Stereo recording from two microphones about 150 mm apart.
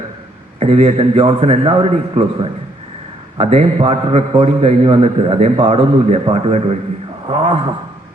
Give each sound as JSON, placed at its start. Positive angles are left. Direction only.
{"t": 0.6, "sound": "a man's voice", "side_deg": -45}